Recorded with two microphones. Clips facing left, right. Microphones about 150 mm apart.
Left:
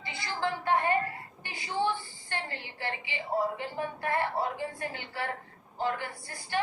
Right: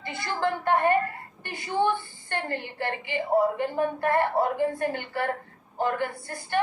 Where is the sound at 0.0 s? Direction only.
55° right (ahead or behind).